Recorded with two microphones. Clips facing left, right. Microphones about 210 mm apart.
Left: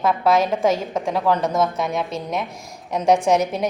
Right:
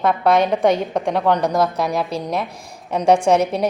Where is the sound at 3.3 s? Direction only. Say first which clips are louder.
Right 2 dB; 30° right (ahead or behind).